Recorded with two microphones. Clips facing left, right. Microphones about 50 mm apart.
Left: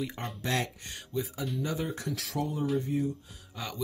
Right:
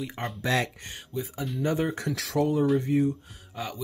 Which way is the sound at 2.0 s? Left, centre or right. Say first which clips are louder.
Right 7 dB; right.